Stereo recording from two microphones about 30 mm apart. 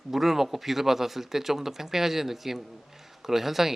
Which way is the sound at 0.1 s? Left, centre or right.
Centre.